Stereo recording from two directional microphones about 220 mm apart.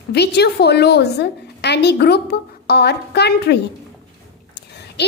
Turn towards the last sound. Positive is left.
turn(degrees=50)  # may be behind; listen again after turning